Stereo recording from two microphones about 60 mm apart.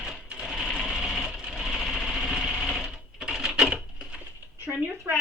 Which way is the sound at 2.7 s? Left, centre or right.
Centre.